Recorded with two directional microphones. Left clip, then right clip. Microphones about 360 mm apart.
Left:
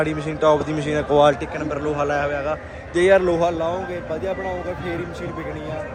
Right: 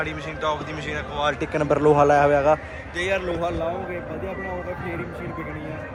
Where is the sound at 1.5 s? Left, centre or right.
Centre.